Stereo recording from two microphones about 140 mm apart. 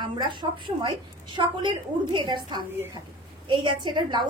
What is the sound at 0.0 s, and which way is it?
A woman's voice, 35° right (ahead or behind).